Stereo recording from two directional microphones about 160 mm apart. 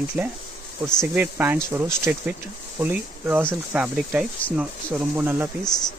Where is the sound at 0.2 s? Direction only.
15° right (ahead or behind).